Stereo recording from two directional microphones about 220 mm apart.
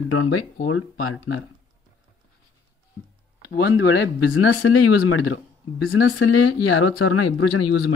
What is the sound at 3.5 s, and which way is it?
Speech, 60° left (ahead or behind).